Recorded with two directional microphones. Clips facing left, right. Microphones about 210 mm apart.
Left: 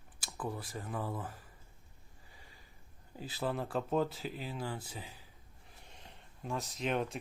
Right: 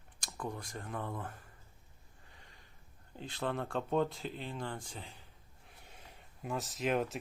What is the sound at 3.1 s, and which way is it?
Speech, 5° left (ahead or behind).